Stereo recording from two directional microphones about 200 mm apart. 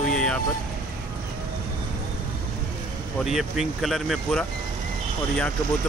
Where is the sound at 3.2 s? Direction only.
Centre (ahead or behind).